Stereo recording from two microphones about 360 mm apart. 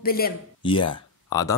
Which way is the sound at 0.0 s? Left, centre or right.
Left.